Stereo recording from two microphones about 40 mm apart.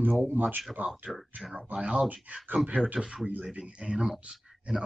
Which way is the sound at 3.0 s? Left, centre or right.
Right.